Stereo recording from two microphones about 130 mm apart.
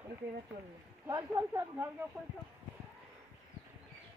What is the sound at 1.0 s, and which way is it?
Speech, 25° right (ahead or behind).